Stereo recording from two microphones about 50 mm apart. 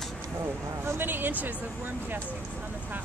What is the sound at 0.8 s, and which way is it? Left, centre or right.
Speech, right.